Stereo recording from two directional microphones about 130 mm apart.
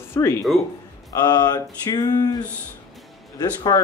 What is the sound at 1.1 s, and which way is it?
Speech, 30° left (ahead or behind).